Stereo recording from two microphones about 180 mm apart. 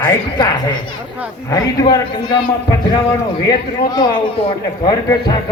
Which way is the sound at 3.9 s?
25° left (ahead or behind).